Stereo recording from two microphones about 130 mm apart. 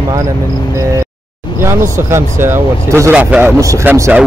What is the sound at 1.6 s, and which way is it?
A man's voice, 20° right (ahead or behind).